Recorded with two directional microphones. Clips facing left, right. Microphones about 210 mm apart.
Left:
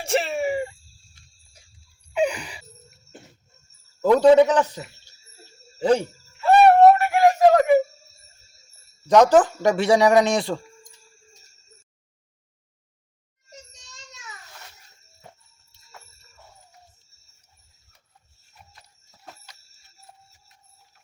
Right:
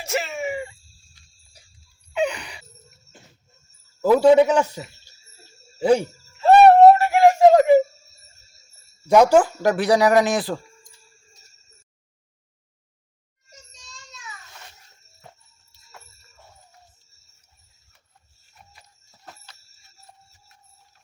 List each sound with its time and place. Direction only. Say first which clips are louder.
0.0 s wail: left 3 dB; 30° left (ahead or behind)
2.1 s music: left 1 dB; 10° left (ahead or behind)
4.0 s a man's voice: even; 5° right (ahead or behind)
5.8 s a man's voice: right 2 dB; 10° right (ahead or behind)
6.4 s a sound: right 3 dB; 30° right (ahead or behind)
9.0 s speech: even; 10° right (ahead or behind)
18.7 s horse: right 1 dB; centre (ahead or behind)